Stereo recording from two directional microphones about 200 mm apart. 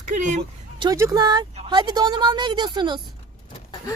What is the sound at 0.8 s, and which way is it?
A woman's voice, 15° right (ahead or behind).